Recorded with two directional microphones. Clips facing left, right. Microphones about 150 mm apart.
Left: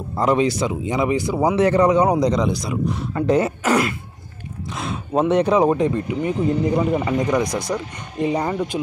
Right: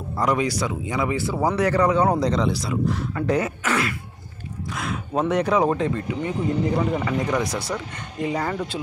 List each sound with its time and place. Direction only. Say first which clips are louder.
0.1 s speech: left 4 dB; 25° left (ahead or behind)
4.7 s a sound: left 4 dB; 25° left (ahead or behind)
5.2 s speech: left 4 dB; 20° left (ahead or behind)